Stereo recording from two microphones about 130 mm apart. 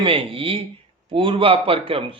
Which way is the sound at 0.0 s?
45° right (ahead or behind).